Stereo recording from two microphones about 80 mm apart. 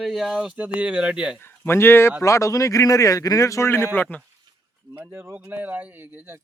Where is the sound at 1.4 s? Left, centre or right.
Left.